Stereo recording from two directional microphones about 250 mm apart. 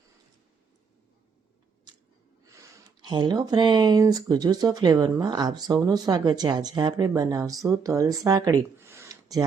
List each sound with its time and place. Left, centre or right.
3.1 s speech: centre